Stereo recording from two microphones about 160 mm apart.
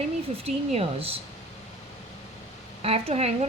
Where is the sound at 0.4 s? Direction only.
40° right (ahead or behind).